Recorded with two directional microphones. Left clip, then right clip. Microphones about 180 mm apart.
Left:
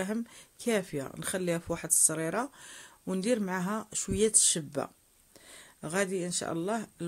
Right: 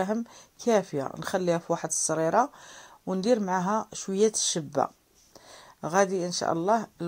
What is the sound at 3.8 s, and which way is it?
Speech, 15° left (ahead or behind).